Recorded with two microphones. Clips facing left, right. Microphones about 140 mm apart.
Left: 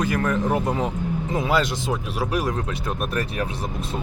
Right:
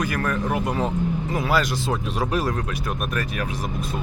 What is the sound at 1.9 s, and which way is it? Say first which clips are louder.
Speech: right 1 dB; 5° left (ahead or behind).